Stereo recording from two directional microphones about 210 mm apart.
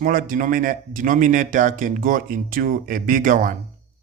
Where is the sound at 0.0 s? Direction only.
40° right (ahead or behind).